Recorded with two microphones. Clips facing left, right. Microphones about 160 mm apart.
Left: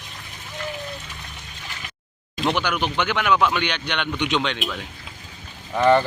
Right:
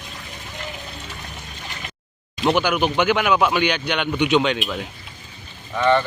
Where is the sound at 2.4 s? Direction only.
5° right (ahead or behind).